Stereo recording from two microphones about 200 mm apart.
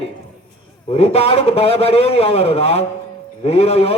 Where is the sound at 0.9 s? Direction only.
30° left (ahead or behind).